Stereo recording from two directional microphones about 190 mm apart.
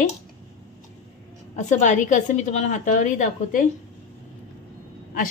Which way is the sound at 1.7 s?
40° left (ahead or behind).